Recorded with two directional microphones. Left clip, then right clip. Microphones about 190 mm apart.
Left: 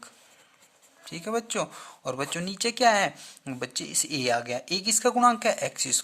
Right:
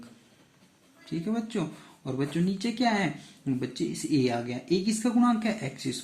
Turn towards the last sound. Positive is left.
turn(degrees=60)  # may be behind; listen again after turning